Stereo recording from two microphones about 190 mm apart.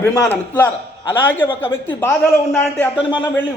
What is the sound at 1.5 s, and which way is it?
Speech, 25° left (ahead or behind).